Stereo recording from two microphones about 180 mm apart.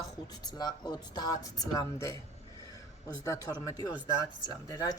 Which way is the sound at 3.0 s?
15° left (ahead or behind).